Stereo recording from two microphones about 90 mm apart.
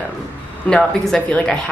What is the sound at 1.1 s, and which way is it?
Speech, 10° left (ahead or behind).